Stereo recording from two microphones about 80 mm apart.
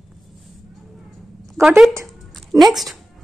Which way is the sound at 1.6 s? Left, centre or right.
Right.